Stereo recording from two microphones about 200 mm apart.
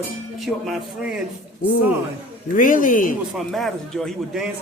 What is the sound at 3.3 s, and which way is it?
A man's voice, centre (ahead or behind).